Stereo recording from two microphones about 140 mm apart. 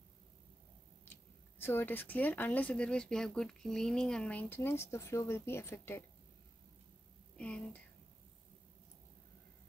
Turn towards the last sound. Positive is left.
turn(degrees=10)  # may be behind; listen again after turning